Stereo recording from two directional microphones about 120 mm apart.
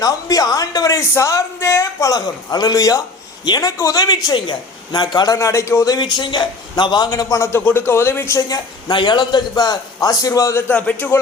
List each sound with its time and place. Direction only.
0.0 s a man's voice: 30° left (ahead or behind)
10.7 s speech: 10° left (ahead or behind)